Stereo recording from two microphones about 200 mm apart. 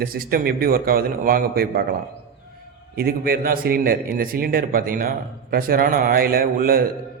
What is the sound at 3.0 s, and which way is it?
A man's voice, 50° right (ahead or behind).